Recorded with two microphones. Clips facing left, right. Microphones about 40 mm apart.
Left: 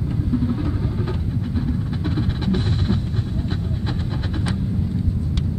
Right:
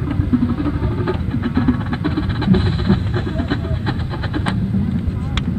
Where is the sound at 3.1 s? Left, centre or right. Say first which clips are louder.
Right 6 dB; right.